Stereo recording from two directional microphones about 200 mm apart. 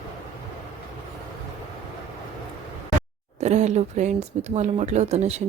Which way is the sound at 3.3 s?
35° right (ahead or behind).